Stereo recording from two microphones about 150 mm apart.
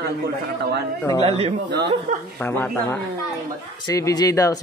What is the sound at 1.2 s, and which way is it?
Speech, 40° right (ahead or behind).